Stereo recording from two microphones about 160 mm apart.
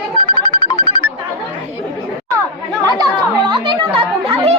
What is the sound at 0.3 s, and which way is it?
Music, 30° left (ahead or behind).